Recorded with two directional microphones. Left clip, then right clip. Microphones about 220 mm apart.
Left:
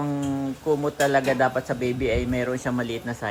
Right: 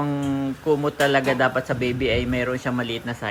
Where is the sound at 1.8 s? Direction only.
30° left (ahead or behind).